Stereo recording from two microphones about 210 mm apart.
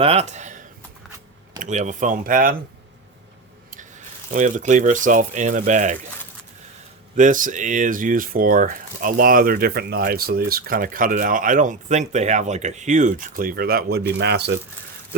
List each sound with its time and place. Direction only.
0.0 s speech: 30° right (ahead or behind)
4.3 s speech: 35° right (ahead or behind)
7.2 s speech: 40° right (ahead or behind)